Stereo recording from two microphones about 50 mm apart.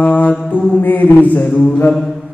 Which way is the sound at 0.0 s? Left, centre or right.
Left.